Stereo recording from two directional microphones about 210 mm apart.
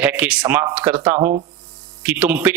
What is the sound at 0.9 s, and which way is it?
Speech, 20° right (ahead or behind).